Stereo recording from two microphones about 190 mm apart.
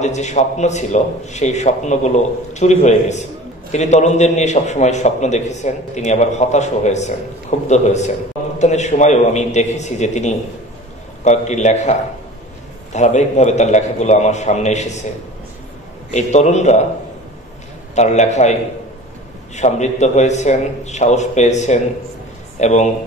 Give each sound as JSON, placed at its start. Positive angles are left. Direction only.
{"t": 0.0, "sound": "a man's voice", "side_deg": 35}
{"t": 12.9, "sound": "a man's voice", "side_deg": 35}
{"t": 16.1, "sound": "a man's voice", "side_deg": 35}
{"t": 17.9, "sound": "a man's voice", "side_deg": 35}